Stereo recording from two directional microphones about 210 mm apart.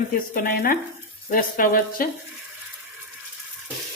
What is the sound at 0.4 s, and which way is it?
Speech, 45° left (ahead or behind).